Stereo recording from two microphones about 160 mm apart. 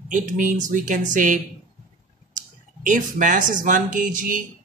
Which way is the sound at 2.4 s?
55° right (ahead or behind).